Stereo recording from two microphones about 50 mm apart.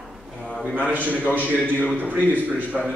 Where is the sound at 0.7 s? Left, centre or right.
Right.